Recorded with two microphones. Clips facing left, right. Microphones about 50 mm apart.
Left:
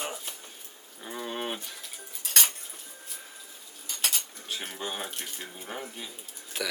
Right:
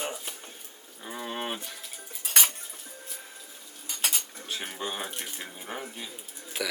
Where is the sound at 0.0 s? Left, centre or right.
Centre.